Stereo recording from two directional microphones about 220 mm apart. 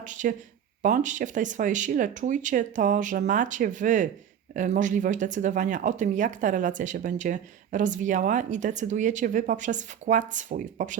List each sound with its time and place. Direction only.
0.0 s speech: 35° right (ahead or behind)